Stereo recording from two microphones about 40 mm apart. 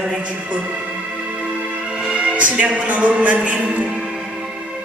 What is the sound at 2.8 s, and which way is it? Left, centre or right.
A man's voice, right.